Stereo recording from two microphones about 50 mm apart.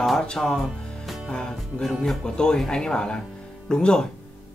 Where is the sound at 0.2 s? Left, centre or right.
Centre.